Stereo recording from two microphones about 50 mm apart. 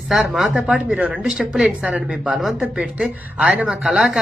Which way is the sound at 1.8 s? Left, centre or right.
Centre.